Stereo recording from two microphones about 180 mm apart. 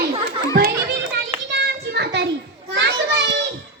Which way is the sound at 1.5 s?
70° right (ahead or behind).